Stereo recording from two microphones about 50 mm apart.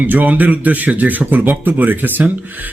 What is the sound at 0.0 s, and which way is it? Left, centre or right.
A man's voice, right.